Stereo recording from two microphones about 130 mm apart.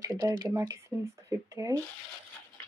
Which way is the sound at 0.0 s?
30° right (ahead or behind).